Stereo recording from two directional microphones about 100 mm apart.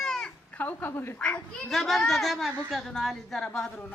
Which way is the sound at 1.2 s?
5° left (ahead or behind).